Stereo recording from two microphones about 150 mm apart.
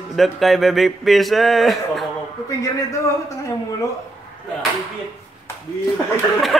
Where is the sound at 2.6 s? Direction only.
20° left (ahead or behind).